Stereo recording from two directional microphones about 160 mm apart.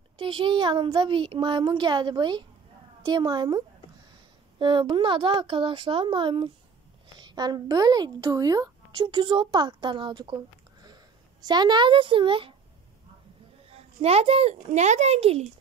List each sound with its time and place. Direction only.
0.2 s a child's voice: 30° right (ahead or behind)
13.7 s a child's voice: 40° right (ahead or behind)